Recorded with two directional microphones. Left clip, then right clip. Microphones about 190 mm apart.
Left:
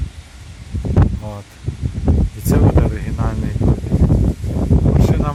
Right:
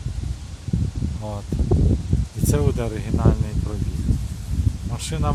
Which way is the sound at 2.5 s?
5° right (ahead or behind).